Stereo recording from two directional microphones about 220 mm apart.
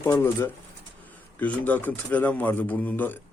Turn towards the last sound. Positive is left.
turn(degrees=10)  # may be behind; listen again after turning